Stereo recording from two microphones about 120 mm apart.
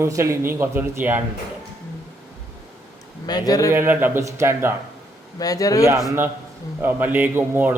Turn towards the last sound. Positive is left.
turn(degrees=-20)  # may be behind; listen again after turning